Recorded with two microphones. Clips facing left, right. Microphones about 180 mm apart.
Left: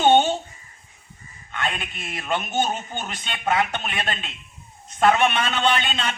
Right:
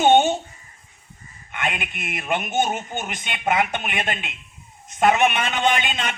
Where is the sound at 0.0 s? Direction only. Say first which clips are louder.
Right 1 dB; 10° right (ahead or behind).